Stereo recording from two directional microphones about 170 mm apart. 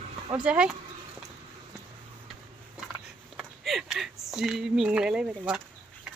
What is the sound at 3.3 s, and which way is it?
Speech, centre (ahead or behind).